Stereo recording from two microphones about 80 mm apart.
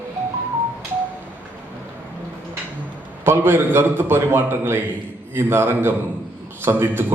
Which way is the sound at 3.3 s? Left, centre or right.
Right.